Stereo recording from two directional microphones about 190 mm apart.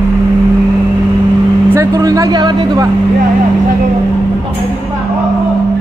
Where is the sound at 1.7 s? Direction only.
15° right (ahead or behind).